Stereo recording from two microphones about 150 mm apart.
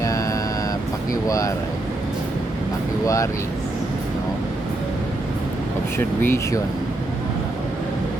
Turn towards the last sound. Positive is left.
turn(degrees=15)  # may be behind; listen again after turning